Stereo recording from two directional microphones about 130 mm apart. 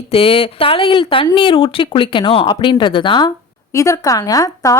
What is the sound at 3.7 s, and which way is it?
Speech, 25° left (ahead or behind).